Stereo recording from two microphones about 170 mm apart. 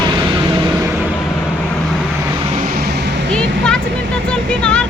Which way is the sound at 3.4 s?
5° left (ahead or behind).